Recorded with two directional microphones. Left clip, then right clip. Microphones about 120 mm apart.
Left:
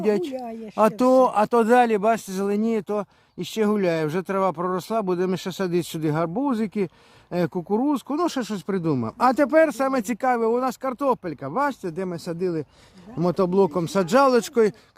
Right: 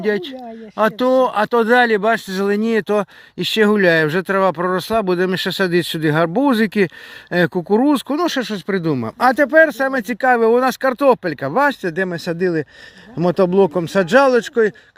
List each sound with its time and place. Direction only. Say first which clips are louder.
0.0 s speech: right 3 dB; 10° left (ahead or behind); by 8.2 s 20° right (ahead or behind)
8.2 s speech: right 6 dB; centre (ahead or behind)
9.3 s speech: right 7 dB; 15° left (ahead or behind)
10.2 s speech: right 9 dB; 15° right (ahead or behind)